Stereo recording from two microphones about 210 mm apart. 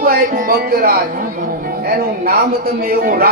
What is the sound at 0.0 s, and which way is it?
A man's voice, 40° right (ahead or behind).